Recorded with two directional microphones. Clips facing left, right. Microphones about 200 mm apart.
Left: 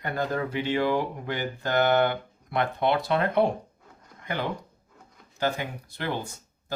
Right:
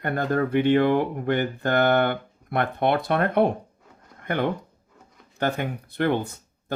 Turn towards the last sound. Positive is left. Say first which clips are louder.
# right 5 dB
turn(degrees=-60)  # may be behind; listen again after turning